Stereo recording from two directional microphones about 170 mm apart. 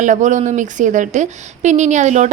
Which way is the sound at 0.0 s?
45° right (ahead or behind).